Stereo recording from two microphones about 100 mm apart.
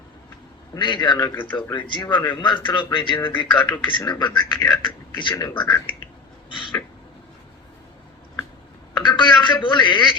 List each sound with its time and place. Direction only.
0.8 s a man's voice: 50° left (ahead or behind)
1.3 s speech: 20° left (ahead or behind)
1.7 s a man's voice: 50° left (ahead or behind)
9.0 s a man's voice: 50° left (ahead or behind)